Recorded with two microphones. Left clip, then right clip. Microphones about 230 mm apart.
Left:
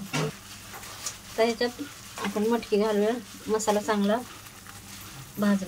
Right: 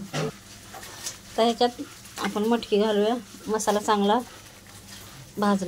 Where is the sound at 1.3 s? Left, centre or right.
Centre.